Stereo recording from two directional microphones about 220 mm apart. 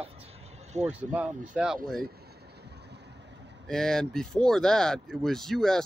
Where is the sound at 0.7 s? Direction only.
30° right (ahead or behind).